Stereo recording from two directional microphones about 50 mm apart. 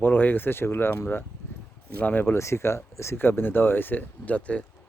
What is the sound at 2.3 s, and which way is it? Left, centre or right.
Speech, left.